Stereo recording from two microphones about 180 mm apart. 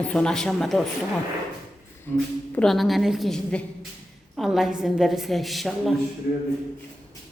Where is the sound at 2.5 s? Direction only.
Centre (ahead or behind).